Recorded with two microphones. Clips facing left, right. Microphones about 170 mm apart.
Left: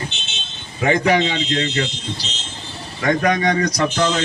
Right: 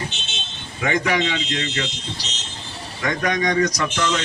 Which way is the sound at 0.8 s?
30° left (ahead or behind).